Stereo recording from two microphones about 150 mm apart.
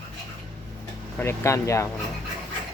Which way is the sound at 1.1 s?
15° left (ahead or behind).